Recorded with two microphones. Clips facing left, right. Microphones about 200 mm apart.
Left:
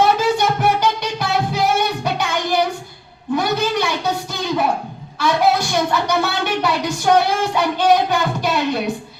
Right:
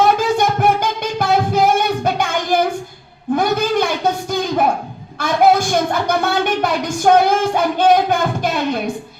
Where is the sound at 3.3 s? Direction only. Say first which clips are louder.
Right 3 dB; 50° right (ahead or behind).